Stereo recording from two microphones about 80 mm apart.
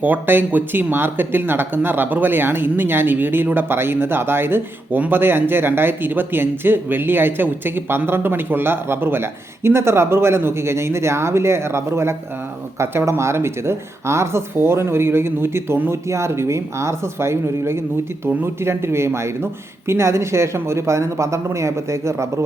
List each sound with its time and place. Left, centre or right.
0.0 s speech: right